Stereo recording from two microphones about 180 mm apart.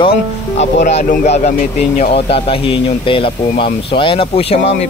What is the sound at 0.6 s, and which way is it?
Speech, 40° left (ahead or behind).